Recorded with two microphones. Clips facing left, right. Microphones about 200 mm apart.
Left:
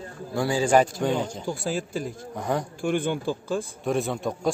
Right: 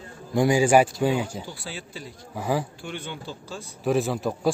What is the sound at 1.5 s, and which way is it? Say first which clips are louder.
Speech: left 10 dB; 45° left (ahead or behind).